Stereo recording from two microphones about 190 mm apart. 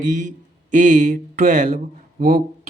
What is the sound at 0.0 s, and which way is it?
Speech, 40° right (ahead or behind).